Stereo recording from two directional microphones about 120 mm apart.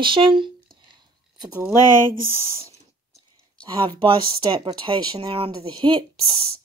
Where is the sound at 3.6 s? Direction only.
40° right (ahead or behind).